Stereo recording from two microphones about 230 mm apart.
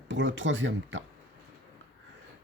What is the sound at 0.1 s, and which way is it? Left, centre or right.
Speech, right.